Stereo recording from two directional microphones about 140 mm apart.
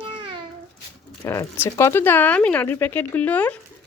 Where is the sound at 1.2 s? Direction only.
20° left (ahead or behind).